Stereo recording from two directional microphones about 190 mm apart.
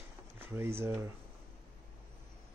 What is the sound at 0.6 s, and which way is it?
Speech, 15° right (ahead or behind).